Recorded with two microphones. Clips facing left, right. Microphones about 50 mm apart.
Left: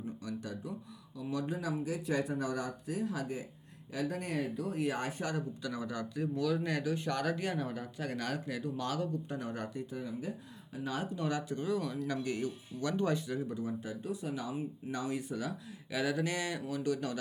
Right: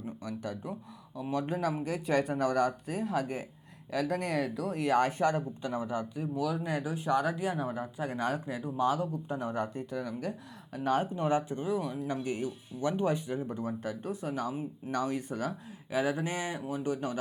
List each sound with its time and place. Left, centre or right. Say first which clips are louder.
0.2 s speech: right 3 dB; right
3.9 s speech: right 5 dB; right
6.3 s speech: right 1 dB; centre; by 9.8 s right
9.9 s speech: right 4 dB; right
11.0 s speech: right 6 dB; right
13.5 s speech: right 3 dB; right
15.9 s speech: right 3 dB; right